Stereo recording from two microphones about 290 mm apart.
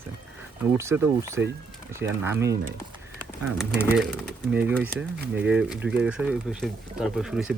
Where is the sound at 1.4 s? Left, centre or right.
Right.